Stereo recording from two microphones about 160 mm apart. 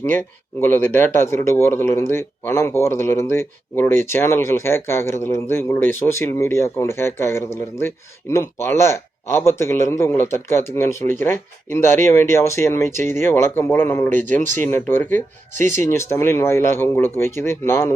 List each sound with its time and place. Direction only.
0.0 s speech: 15° left (ahead or behind)